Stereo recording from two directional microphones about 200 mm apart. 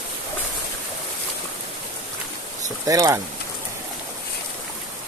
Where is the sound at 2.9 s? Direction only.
15° right (ahead or behind).